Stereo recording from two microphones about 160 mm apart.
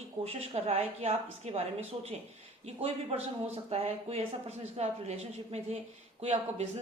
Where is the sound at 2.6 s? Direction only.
40° right (ahead or behind).